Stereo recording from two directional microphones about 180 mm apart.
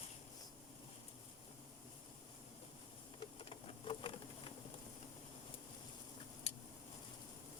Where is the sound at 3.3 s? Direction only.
30° left (ahead or behind).